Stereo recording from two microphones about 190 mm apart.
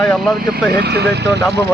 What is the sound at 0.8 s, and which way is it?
Speech, 60° right (ahead or behind).